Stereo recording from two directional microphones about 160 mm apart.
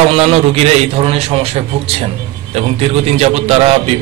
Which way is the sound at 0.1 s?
40° right (ahead or behind).